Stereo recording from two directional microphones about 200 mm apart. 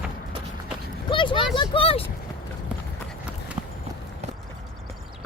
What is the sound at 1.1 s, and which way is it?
Speech, 25° left (ahead or behind).